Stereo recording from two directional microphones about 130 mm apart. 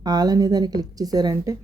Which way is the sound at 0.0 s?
30° right (ahead or behind).